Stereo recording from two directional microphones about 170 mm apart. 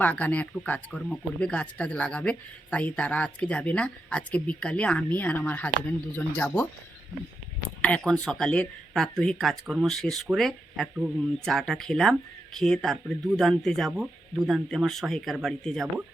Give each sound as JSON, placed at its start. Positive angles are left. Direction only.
{"t": 0.0, "sound": "speech", "side_deg": 10}
{"t": 7.8, "sound": "speech", "side_deg": 10}